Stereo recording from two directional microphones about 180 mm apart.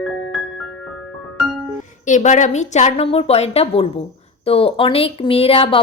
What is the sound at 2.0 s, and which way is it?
A woman's voice, 45° left (ahead or behind).